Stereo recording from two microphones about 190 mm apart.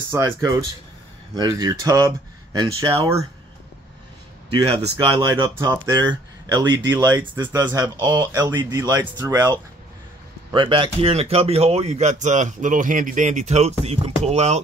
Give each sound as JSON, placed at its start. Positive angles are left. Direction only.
{"t": 0.1, "sound": "speech", "side_deg": -20}
{"t": 4.7, "sound": "speech", "side_deg": -25}